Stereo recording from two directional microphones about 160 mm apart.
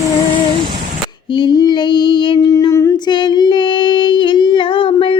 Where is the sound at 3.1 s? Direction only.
30° left (ahead or behind).